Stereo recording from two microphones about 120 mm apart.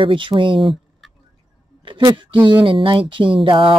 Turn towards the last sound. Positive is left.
turn(degrees=-45)  # may be behind; listen again after turning